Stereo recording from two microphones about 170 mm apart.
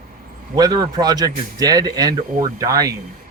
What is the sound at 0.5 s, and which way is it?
A man's voice, 25° right (ahead or behind).